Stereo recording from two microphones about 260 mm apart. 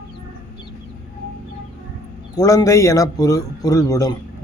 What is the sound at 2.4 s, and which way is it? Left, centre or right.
A man's voice, centre.